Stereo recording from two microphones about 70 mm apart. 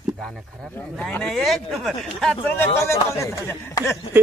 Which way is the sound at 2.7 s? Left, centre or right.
Left.